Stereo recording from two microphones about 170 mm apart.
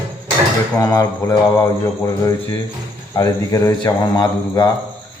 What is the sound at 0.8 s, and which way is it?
Mantra, 15° left (ahead or behind).